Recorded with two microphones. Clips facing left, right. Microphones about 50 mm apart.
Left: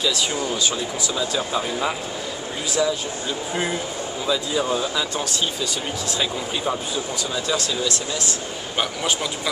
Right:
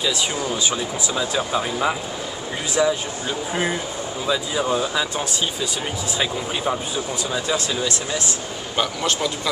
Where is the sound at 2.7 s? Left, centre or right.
Right.